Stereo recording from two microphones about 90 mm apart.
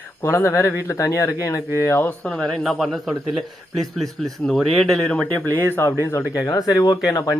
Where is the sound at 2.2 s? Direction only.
Centre (ahead or behind).